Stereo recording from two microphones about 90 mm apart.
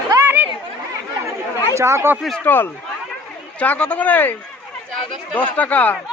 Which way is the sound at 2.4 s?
25° left (ahead or behind).